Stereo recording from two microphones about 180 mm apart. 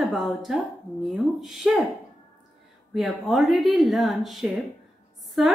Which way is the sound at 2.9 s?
Centre (ahead or behind).